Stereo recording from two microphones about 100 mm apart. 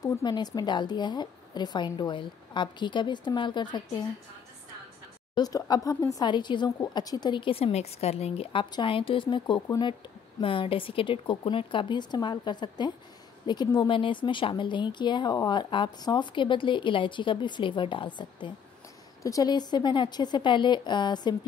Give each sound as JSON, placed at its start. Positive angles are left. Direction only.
{"t": 0.2, "sound": "speech", "side_deg": 45}
{"t": 5.3, "sound": "speech", "side_deg": 40}
{"t": 6.1, "sound": "speech", "side_deg": 50}
{"t": 8.8, "sound": "speech", "side_deg": 60}
{"t": 10.4, "sound": "speech", "side_deg": 60}
{"t": 19.2, "sound": "speech", "side_deg": 40}